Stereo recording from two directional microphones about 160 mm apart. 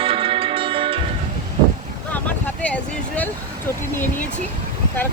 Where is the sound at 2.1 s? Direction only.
10° left (ahead or behind).